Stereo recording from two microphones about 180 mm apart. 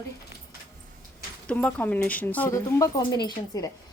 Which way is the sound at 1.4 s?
5° left (ahead or behind).